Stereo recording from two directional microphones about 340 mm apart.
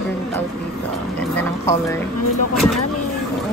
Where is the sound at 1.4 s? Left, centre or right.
Centre.